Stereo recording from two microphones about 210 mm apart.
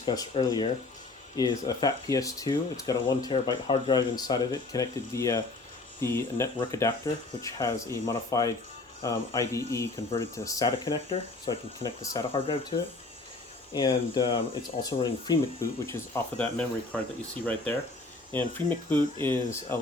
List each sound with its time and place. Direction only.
0.0 s speech: 20° left (ahead or behind)
15.9 s speech: 10° left (ahead or behind)
18.3 s speech: 10° left (ahead or behind)